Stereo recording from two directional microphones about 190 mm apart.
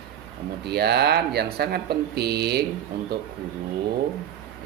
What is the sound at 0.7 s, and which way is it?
Speech, 60° right (ahead or behind).